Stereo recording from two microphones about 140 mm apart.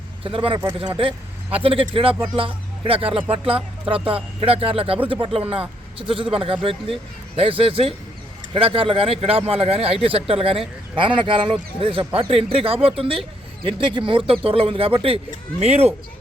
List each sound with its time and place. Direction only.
0.3 s speech: 40° right (ahead or behind)